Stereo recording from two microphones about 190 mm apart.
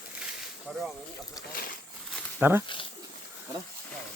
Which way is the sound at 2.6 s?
25° left (ahead or behind).